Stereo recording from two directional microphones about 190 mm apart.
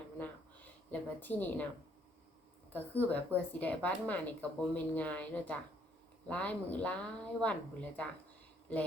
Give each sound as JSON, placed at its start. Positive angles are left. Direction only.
{"t": 0.9, "sound": "speech", "side_deg": 10}
{"t": 2.7, "sound": "speech", "side_deg": 10}